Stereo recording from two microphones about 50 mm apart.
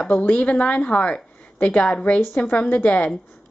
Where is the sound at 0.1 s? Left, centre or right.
Left.